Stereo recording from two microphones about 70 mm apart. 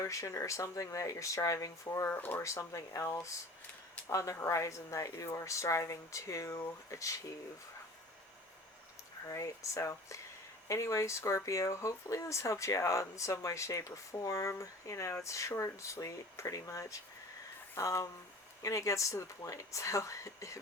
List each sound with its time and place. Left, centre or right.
0.0 s speech: left
2.0 s speech: left
2.4 s speech: left
9.2 s speech: left